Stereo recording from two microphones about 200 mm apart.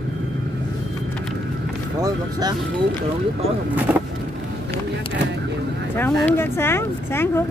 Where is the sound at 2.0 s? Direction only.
20° right (ahead or behind).